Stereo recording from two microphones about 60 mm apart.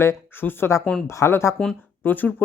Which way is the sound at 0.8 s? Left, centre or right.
Centre.